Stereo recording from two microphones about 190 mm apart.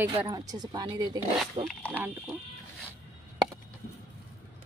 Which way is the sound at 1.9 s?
10° right (ahead or behind).